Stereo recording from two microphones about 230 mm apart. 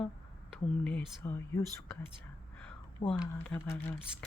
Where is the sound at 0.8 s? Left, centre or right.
Centre.